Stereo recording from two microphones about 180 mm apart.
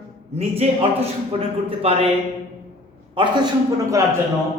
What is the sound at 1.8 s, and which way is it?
Speech, 35° right (ahead or behind).